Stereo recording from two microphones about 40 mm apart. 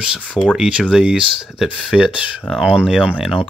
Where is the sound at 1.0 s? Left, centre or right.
Centre.